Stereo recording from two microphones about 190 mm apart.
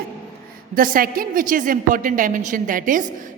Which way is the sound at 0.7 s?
45° right (ahead or behind).